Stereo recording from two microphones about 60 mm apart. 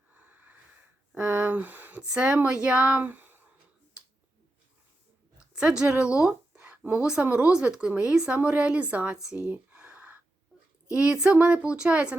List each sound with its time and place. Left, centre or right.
0.1 s wheeze: right
1.1 s speech: right
2.0 s speech: centre
5.5 s a woman's voice: centre
9.1 s a sound: centre
10.9 s speech: centre